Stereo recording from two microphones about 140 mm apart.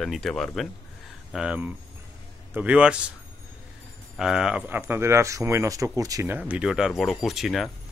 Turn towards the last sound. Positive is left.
turn(degrees=0)  # may be behind; listen again after turning